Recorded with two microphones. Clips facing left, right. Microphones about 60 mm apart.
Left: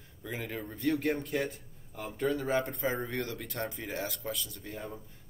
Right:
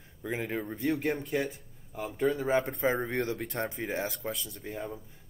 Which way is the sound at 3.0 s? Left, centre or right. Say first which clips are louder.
Right 4 dB; right.